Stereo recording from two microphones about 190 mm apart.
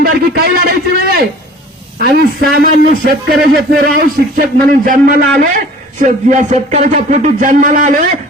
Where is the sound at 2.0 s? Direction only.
55° right (ahead or behind).